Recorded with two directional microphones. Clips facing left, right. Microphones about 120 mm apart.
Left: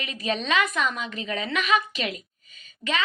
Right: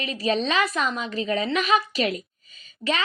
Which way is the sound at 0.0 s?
35° right (ahead or behind).